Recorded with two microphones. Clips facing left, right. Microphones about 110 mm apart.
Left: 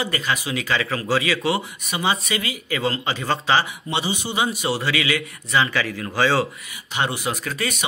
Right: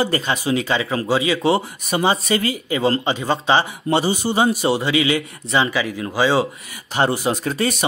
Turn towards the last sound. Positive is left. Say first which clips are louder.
# right 6 dB
turn(degrees=-30)  # may be behind; listen again after turning